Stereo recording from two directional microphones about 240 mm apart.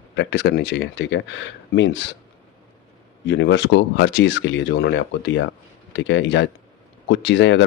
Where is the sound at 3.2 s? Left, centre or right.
Left.